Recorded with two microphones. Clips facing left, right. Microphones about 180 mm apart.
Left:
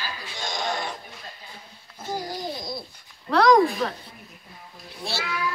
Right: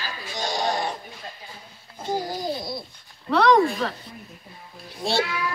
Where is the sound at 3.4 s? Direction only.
10° left (ahead or behind).